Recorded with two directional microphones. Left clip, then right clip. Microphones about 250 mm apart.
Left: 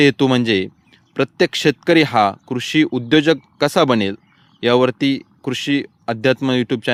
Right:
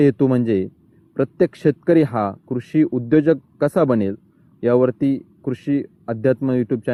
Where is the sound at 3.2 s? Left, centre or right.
Left.